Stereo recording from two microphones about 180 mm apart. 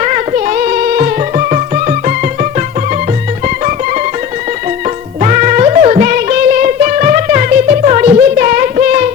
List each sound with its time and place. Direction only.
0.0 s music: 40° right (ahead or behind)
5.2 s music: 40° right (ahead or behind)